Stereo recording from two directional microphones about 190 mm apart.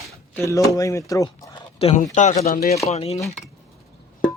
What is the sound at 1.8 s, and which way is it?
Speech, 30° left (ahead or behind).